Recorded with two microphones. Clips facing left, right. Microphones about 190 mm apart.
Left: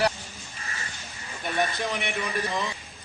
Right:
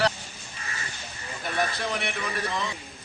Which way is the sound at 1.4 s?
Centre (ahead or behind).